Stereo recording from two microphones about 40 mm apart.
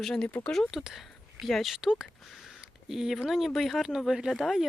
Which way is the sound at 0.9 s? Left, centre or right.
Centre.